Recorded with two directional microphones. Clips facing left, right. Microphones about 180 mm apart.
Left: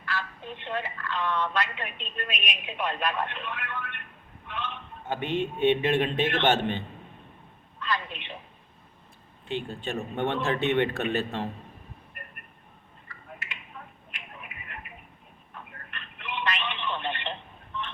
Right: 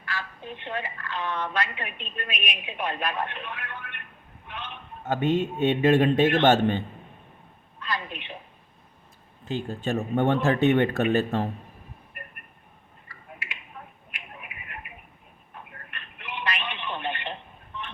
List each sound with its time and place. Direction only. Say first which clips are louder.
0.0 s a woman's voice: left 1 dB; 10° right (ahead or behind)
4.4 s a sound: left 3 dB; 10° right (ahead or behind)
5.0 s speech: right 5 dB; 40° right (ahead or behind)
7.9 s speech: left 1 dB; 10° right (ahead or behind)
9.5 s speech: right 4 dB; 40° right (ahead or behind)
14.1 s a sound: right 1 dB; 10° right (ahead or behind)
15.9 s telephone: left 2 dB; 10° right (ahead or behind)